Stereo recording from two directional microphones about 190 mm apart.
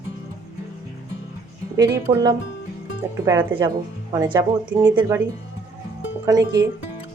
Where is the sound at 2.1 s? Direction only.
20° right (ahead or behind).